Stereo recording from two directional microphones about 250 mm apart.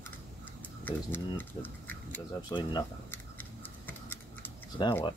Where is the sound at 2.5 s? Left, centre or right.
Centre.